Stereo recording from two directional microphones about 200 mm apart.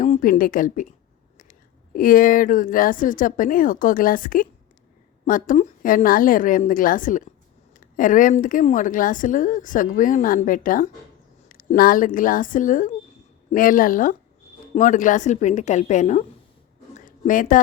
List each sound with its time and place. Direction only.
0.0 s a woman's voice: 40° left (ahead or behind)